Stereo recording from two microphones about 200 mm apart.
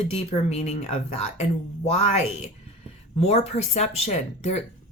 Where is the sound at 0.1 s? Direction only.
30° left (ahead or behind).